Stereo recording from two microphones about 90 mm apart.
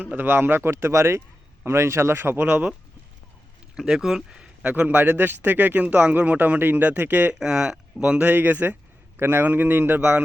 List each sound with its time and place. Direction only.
0.0 s speech: 20° right (ahead or behind)
3.8 s speech: 5° right (ahead or behind)
7.3 s speech: 5° right (ahead or behind)